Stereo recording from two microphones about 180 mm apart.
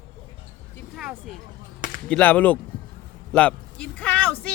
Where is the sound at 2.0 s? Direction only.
5° left (ahead or behind).